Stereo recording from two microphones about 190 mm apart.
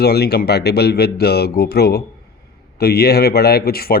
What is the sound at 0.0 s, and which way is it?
Speech, 55° left (ahead or behind).